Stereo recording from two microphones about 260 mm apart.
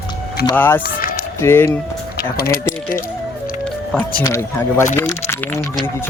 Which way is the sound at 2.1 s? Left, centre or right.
Left.